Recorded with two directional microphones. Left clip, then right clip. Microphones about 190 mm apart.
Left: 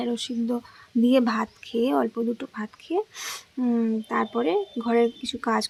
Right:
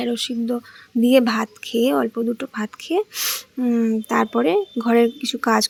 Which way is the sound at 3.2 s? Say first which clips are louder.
Right 6 dB; 10° right (ahead or behind).